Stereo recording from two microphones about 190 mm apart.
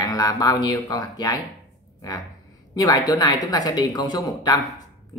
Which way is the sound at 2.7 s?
20° left (ahead or behind).